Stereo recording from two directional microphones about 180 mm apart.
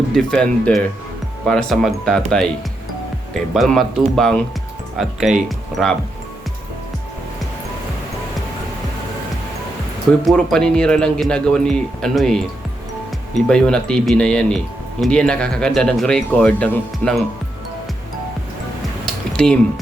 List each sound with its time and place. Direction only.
0.1 s speech: 5° left (ahead or behind)
3.5 s speech: centre (ahead or behind)
10.2 s speech: 5° left (ahead or behind)
19.0 s a sound: 5° left (ahead or behind)